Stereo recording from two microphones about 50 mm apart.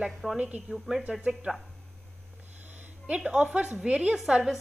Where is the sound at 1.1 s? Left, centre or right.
Right.